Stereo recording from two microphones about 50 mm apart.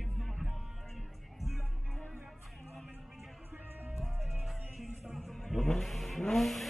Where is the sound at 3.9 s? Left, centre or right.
Right.